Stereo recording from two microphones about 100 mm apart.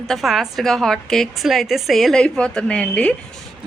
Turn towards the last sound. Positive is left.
turn(degrees=10)  # may be behind; listen again after turning